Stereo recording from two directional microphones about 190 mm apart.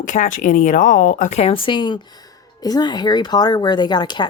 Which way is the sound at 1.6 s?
25° left (ahead or behind).